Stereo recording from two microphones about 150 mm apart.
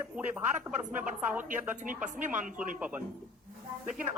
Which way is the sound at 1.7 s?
60° right (ahead or behind).